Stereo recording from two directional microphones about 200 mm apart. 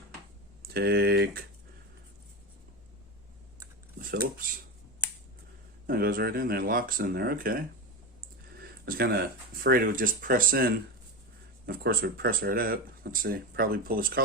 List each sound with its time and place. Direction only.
0.7 s speech: 50° right (ahead or behind)
5.8 s speech: 45° right (ahead or behind)